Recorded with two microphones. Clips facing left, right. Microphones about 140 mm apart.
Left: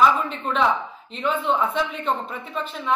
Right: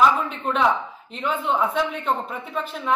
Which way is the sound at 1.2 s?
10° right (ahead or behind).